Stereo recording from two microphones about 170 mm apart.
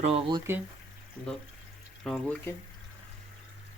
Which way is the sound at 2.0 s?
5° left (ahead or behind).